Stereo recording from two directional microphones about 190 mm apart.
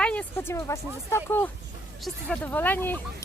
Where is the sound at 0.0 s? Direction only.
5° left (ahead or behind).